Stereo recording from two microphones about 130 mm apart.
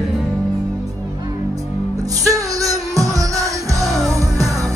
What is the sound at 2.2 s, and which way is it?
Music, 25° right (ahead or behind).